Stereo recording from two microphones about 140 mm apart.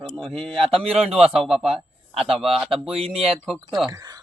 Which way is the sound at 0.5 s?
40° right (ahead or behind).